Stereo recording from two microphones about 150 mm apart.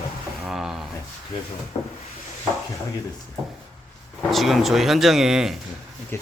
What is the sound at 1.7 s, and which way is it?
Rub, 35° left (ahead or behind).